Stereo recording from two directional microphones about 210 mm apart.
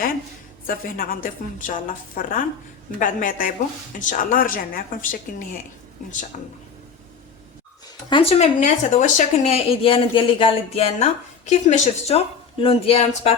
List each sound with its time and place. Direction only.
0.7 s a woman's voice: 40° left (ahead or behind)
8.1 s speech: 30° left (ahead or behind)